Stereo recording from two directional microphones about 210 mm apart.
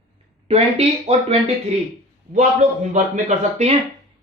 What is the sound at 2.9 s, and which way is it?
Speech, 35° right (ahead or behind).